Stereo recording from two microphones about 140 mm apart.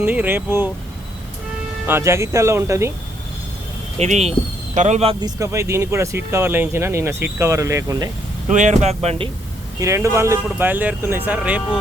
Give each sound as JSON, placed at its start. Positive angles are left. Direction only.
{"t": 0.0, "sound": "speech", "side_deg": -10}
{"t": 1.9, "sound": "speech", "side_deg": -20}
{"t": 3.9, "sound": "speech", "side_deg": -50}
{"t": 5.2, "sound": "speech", "side_deg": -20}
{"t": 8.4, "sound": "speech", "side_deg": -60}
{"t": 9.8, "sound": "speech", "side_deg": -20}